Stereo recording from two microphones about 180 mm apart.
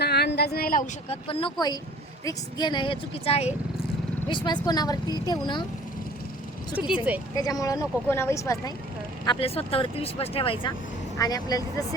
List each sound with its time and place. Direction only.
0.0 s a sound: 65° left (ahead or behind)
1.1 s speech: 30° left (ahead or behind)
6.7 s speech: 5° right (ahead or behind)
7.3 s speech: 20° left (ahead or behind)
9.2 s speech: 30° left (ahead or behind)